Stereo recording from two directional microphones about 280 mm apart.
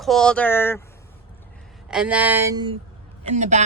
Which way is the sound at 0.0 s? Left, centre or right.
Centre.